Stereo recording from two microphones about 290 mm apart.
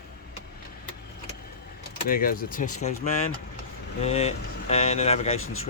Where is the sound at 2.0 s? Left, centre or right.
Left.